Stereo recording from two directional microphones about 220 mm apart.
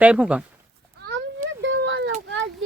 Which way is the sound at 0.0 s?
5° right (ahead or behind).